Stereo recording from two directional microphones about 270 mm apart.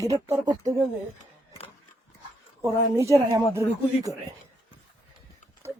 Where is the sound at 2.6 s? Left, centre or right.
Centre.